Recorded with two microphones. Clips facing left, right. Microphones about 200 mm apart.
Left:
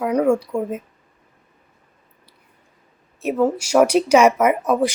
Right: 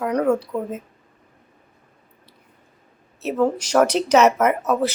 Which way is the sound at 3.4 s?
10° left (ahead or behind).